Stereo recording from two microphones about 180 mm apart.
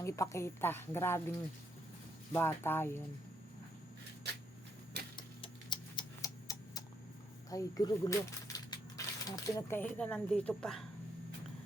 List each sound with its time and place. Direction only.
0.0 s speech: 15° left (ahead or behind)
2.3 s speech: 10° left (ahead or behind)
5.1 s a sound: 25° left (ahead or behind)
7.5 s speech: 20° left (ahead or behind); by 10.8 s 5° left (ahead or behind)